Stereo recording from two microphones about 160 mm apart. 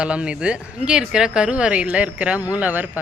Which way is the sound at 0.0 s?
5° right (ahead or behind).